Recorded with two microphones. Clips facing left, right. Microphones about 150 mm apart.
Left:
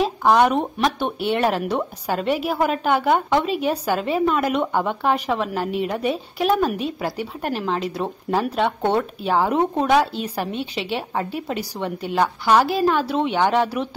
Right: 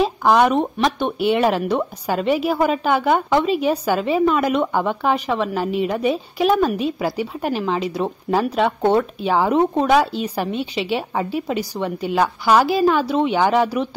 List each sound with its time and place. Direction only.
0.0 s speech: centre (ahead or behind)